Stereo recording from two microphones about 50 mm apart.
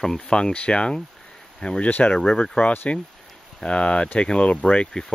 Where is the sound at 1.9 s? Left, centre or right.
Left.